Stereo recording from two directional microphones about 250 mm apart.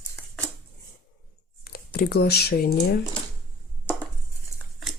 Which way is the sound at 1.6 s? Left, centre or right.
Left.